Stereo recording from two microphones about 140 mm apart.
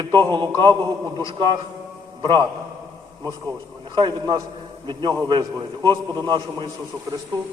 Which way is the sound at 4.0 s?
30° right (ahead or behind).